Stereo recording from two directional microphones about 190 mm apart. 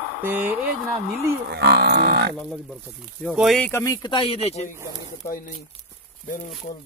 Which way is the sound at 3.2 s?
Centre (ahead or behind).